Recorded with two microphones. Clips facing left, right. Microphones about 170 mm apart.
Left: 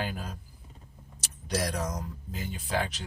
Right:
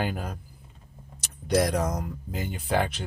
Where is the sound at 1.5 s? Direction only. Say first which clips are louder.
Right 7 dB; 60° right (ahead or behind).